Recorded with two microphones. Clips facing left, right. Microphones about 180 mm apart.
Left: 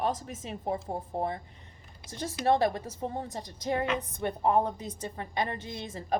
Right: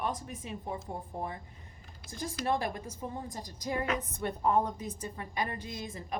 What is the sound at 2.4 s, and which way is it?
A woman's voice, 30° left (ahead or behind).